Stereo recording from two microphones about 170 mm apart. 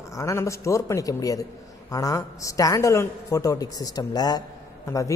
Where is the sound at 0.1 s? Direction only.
15° left (ahead or behind).